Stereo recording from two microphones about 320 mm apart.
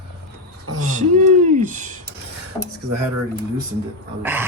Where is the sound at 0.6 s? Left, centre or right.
Right.